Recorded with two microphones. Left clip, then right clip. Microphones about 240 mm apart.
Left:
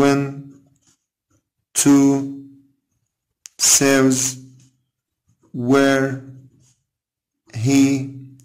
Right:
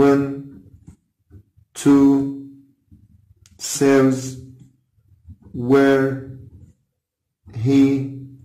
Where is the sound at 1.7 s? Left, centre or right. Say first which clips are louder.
Even; left.